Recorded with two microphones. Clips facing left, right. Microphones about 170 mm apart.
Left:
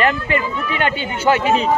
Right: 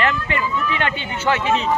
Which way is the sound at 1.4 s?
45° left (ahead or behind).